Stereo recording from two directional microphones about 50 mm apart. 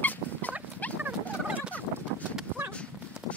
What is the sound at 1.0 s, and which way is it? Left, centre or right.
Fowl, right.